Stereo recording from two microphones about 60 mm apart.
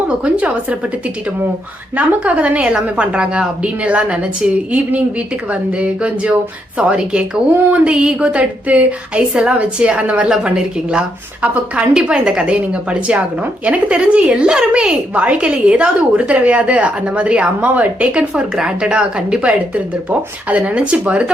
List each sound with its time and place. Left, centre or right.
0.2 s a woman's voice: right
2.0 s a woman's voice: right